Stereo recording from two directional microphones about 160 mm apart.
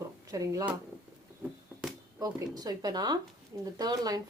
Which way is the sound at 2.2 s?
20° right (ahead or behind).